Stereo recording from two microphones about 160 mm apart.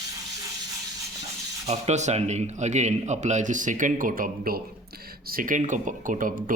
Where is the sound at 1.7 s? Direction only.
45° right (ahead or behind).